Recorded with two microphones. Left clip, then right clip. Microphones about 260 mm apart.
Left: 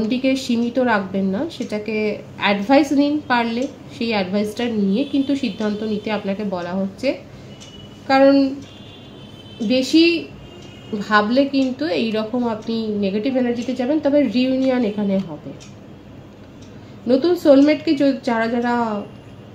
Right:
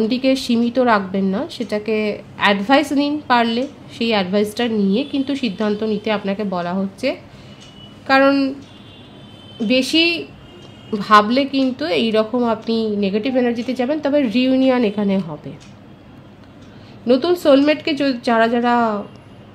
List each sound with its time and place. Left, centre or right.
0.1 s speech: right
9.7 s speech: right
17.1 s speech: right